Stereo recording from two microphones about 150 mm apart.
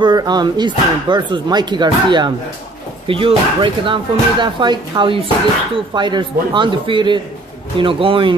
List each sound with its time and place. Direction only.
0.0 s speech: 25° right (ahead or behind)